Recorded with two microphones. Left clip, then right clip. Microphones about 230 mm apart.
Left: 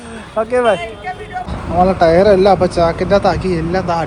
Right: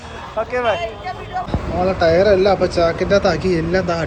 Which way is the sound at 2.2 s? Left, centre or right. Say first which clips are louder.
Left 4 dB; left.